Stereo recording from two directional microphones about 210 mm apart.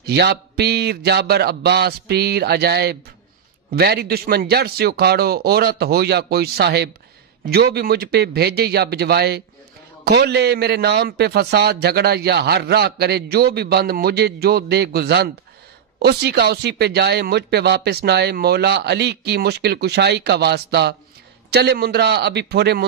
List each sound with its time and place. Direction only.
0.0 s a man's voice: 50° right (ahead or behind)